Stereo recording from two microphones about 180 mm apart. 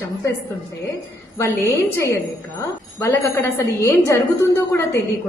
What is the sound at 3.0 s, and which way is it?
A woman's voice, 15° left (ahead or behind).